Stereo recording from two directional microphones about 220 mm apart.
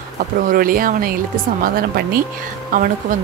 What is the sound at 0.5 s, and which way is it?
Speech, 40° right (ahead or behind).